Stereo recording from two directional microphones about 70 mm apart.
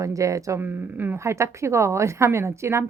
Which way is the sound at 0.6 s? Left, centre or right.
Right.